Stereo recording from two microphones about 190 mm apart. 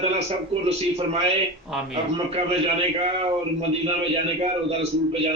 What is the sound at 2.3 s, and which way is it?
A man's voice, 30° right (ahead or behind).